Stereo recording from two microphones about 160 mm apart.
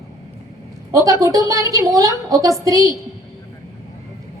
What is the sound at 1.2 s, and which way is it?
A woman's voice, 20° right (ahead or behind).